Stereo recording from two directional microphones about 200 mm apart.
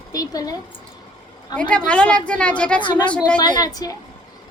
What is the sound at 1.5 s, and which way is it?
Speech, 20° left (ahead or behind).